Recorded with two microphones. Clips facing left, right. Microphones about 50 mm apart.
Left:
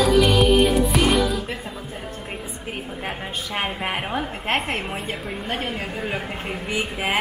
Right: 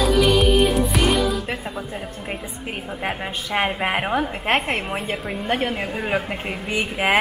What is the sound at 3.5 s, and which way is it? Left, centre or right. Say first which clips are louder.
A woman's voice: right 5 dB; right.